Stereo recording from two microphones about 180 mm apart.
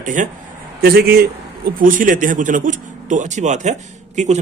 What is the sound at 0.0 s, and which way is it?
Speech, 45° right (ahead or behind).